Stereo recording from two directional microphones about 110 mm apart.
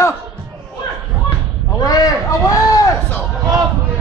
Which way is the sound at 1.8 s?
35° left (ahead or behind).